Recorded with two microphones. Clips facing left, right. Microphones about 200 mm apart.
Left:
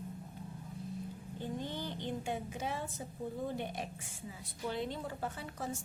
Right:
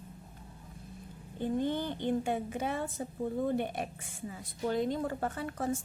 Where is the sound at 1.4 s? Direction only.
55° right (ahead or behind).